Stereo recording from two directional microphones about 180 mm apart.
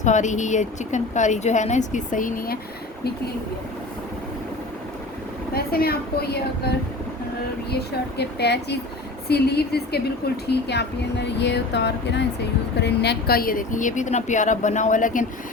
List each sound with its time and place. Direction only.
0.0 s a woman's voice: 40° left (ahead or behind)
5.5 s a woman's voice: 55° left (ahead or behind)